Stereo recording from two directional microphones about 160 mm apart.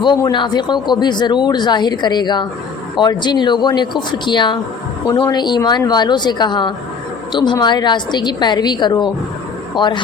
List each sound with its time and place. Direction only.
0.2 s a woman's voice: 30° left (ahead or behind)